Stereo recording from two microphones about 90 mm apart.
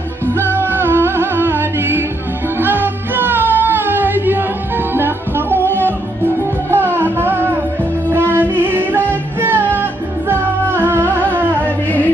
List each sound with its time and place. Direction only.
0.3 s music: 25° right (ahead or behind)
11.6 s music: 20° left (ahead or behind)